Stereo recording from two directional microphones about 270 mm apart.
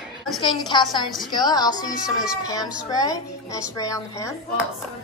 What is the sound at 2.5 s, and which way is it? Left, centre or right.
A child's voice, centre.